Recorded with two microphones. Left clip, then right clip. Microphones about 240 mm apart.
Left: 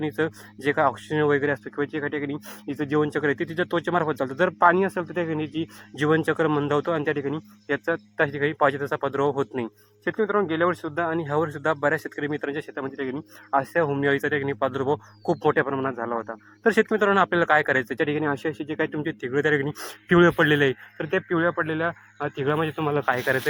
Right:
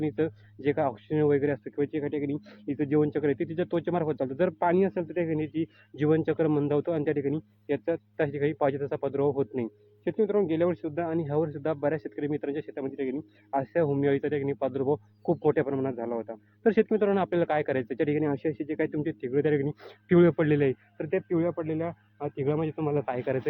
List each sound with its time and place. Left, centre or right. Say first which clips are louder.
0.0 s speech: left 3 dB; centre
1.7 s a man's voice: left 2 dB; left
2.7 s speech: left 2 dB; centre
5.1 s a man's voice: left 2 dB; left
5.4 s speech: left 2 dB; centre
10.6 s speech: left 4 dB; centre
13.0 s a man's voice: even; left
13.5 s speech: left 4 dB; centre
14.8 s a man's voice: left 3 dB; left
15.4 s speech: left 4 dB; centre
21.1 s speech: left 4 dB; left
21.6 s a man's voice: left 6 dB; left
23.0 s speech: left 7 dB; centre